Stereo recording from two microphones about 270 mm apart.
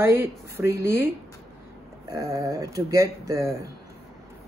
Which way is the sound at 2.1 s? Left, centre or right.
Centre.